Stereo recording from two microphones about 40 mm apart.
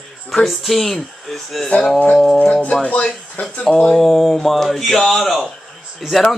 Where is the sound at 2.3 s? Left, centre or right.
Left.